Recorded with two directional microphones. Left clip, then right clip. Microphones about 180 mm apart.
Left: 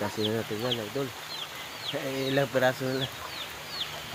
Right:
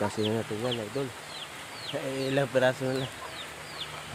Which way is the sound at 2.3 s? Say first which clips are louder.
Even; 5° left (ahead or behind).